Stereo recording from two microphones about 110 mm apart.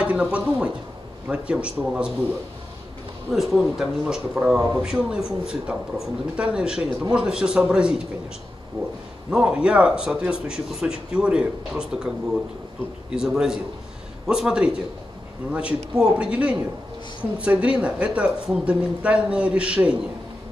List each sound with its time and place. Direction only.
0.0 s speech: 10° right (ahead or behind)
3.3 s speech: centre (ahead or behind)
8.8 s speech: 55° right (ahead or behind)
9.3 s speech: 10° right (ahead or behind)
13.1 s speech: 5° right (ahead or behind)
16.0 s speech: 10° right (ahead or behind)